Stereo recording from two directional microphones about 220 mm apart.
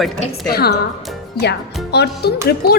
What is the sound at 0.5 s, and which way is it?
A woman's voice, 45° left (ahead or behind).